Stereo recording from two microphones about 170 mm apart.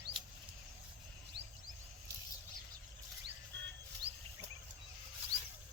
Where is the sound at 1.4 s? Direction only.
90° right.